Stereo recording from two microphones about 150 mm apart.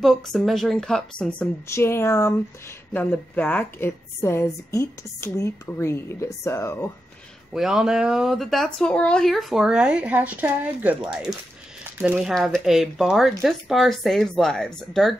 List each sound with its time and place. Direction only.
0.0 s speech: centre (ahead or behind)
1.7 s a woman's voice: 15° left (ahead or behind)
7.5 s speech: 5° right (ahead or behind)
12.4 s speech: centre (ahead or behind)